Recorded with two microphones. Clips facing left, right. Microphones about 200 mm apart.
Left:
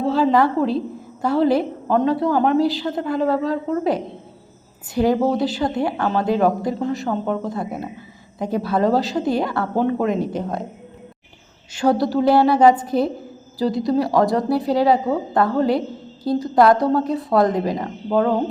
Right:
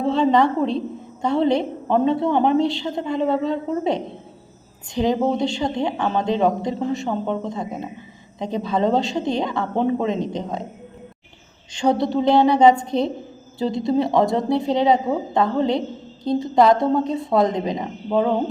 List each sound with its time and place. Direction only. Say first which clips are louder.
0.0 s a woman's voice: even; 5° left (ahead or behind)
5.2 s a woman's voice: left 1 dB; 5° left (ahead or behind)
11.7 s a woman's voice: left 1 dB; 5° left (ahead or behind)
17.6 s speech: left 2 dB; 20° right (ahead or behind)
17.8 s a woman's voice: even; 5° right (ahead or behind)